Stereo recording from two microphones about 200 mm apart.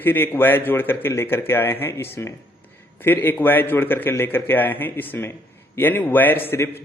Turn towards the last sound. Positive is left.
turn(degrees=10)  # may be behind; listen again after turning